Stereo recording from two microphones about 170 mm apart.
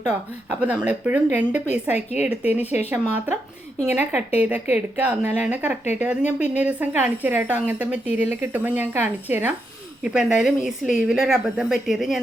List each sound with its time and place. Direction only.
0.6 s speech: 10° right (ahead or behind)
1.6 s a woman's voice: 40° left (ahead or behind)
2.2 s speech: 10° right (ahead or behind)
3.8 s a woman's voice: 10° right (ahead or behind)